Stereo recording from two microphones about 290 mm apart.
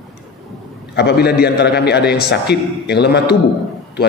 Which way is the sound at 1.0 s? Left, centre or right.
Left.